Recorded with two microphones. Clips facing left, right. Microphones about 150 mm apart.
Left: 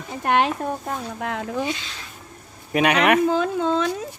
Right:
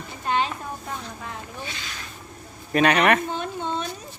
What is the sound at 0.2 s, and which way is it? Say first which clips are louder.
Speech: left 5 dB; 70° left (ahead or behind).